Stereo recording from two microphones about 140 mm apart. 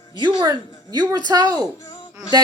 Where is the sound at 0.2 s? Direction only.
35° right (ahead or behind).